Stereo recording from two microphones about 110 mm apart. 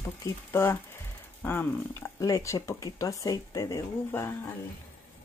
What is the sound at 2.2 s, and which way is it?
Speech, 30° left (ahead or behind).